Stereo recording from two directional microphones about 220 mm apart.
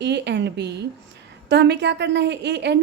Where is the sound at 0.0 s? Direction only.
50° right (ahead or behind).